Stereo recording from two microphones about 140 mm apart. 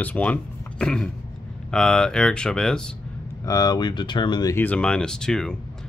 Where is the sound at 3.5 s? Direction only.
25° left (ahead or behind).